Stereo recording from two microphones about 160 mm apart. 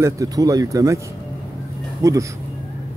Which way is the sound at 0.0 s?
20° right (ahead or behind).